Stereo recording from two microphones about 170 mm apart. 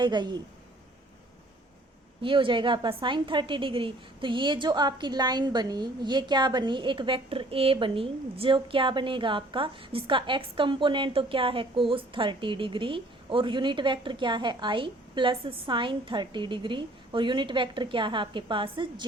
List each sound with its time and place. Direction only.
0.0 s a woman's voice: 25° right (ahead or behind)
2.2 s a woman's voice: 30° right (ahead or behind)